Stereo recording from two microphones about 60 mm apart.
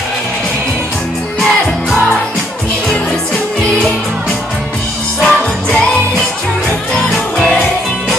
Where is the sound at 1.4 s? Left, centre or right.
Centre.